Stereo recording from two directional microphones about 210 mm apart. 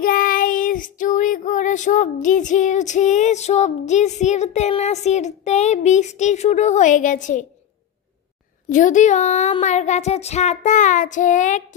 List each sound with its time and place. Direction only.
0.0 s child singing: 40° left (ahead or behind)
8.6 s speech: 35° left (ahead or behind)